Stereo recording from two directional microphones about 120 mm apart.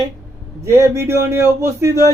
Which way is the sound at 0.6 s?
25° right (ahead or behind).